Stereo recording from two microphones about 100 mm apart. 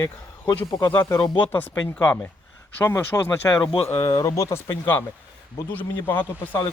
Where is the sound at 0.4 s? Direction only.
50° left (ahead or behind).